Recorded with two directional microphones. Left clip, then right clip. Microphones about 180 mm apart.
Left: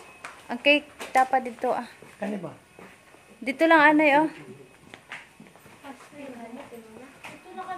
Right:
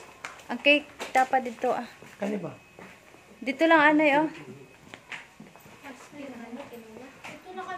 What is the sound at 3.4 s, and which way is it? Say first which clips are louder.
Speech: left 2 dB; 15° left (ahead or behind).